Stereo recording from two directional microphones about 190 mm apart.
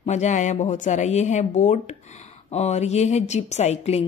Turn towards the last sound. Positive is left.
turn(degrees=35)  # may be behind; listen again after turning